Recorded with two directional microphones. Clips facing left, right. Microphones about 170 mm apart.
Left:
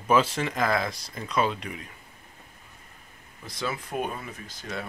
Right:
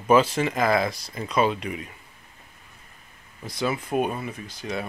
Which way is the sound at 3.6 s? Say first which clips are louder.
Right 6 dB; 15° right (ahead or behind).